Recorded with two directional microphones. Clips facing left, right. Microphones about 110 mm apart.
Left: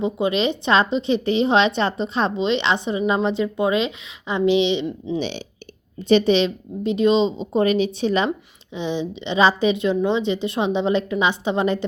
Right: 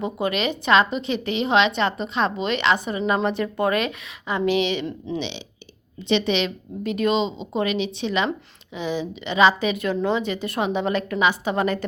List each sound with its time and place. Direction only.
0.0 s a woman's voice: 25° left (ahead or behind)
6.0 s a woman's voice: 40° left (ahead or behind); by 7.3 s 25° left (ahead or behind)
7.5 s a woman's voice: 40° left (ahead or behind)